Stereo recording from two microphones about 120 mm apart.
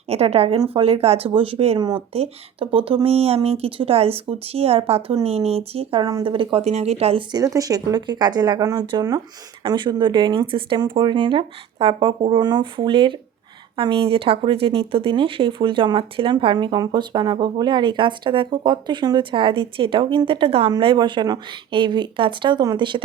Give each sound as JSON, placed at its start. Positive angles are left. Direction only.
{"t": 0.1, "sound": "speech", "side_deg": -60}
{"t": 6.0, "sound": "speech", "side_deg": -35}
{"t": 6.2, "sound": "speech", "side_deg": -45}
{"t": 7.3, "sound": "speech", "side_deg": -30}